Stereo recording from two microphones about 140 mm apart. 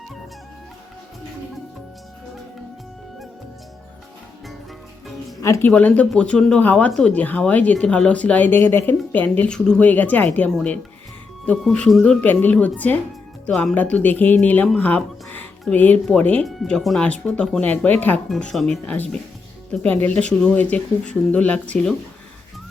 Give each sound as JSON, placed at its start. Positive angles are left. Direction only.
{"t": 5.4, "sound": "speech", "side_deg": 20}
{"t": 5.7, "sound": "speech", "side_deg": 10}